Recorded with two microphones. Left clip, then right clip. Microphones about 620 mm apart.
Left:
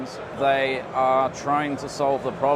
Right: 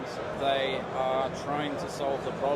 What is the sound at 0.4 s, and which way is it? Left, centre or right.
Speech, left.